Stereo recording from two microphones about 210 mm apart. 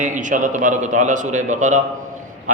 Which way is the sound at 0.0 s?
35° right (ahead or behind).